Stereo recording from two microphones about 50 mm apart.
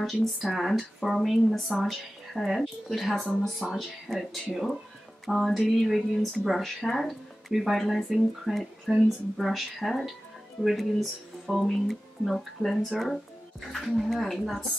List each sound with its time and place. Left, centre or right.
0.0 s speech: centre